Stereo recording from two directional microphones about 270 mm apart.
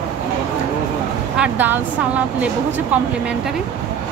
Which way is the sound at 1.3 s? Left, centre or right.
Centre.